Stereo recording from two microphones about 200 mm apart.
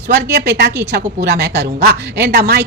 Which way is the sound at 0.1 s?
55° right (ahead or behind).